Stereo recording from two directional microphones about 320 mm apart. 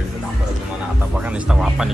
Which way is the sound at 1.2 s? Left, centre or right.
Centre.